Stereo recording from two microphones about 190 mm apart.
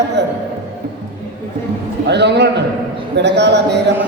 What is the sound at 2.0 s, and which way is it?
A man's voice, 65° right (ahead or behind).